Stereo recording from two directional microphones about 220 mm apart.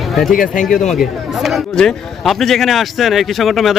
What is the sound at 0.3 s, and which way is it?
Speech, 40° left (ahead or behind).